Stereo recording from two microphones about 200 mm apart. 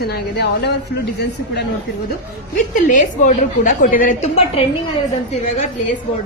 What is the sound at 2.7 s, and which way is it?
A woman's voice, 40° left (ahead or behind).